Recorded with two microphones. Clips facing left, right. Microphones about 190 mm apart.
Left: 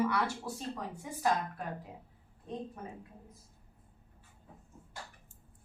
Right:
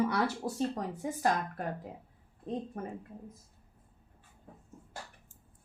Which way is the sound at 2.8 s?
55° right (ahead or behind).